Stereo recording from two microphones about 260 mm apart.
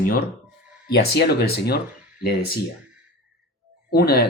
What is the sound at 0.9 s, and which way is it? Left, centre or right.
Speech, left.